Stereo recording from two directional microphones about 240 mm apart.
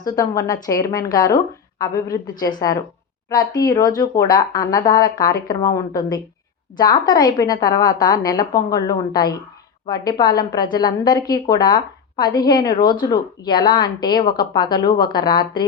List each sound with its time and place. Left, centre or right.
0.0 s a woman's voice: centre